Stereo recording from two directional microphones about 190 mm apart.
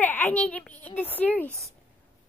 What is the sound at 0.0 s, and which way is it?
A child's voice, 10° left (ahead or behind).